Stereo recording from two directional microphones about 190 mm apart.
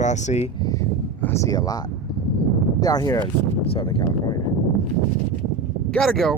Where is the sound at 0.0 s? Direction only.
40° left (ahead or behind).